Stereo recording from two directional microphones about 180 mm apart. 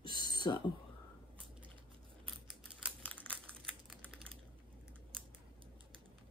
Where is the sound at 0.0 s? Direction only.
25° left (ahead or behind).